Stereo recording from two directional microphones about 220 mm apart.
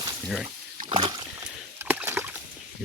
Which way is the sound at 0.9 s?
20° right (ahead or behind).